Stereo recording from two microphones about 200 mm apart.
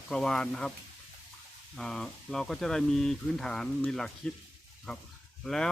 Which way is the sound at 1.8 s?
Centre (ahead or behind).